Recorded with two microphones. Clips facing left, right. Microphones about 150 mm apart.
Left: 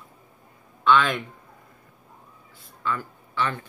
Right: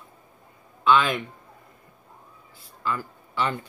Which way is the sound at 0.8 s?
Centre (ahead or behind).